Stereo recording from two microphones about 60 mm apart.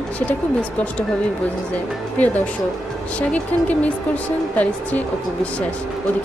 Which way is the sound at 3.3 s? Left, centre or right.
Left.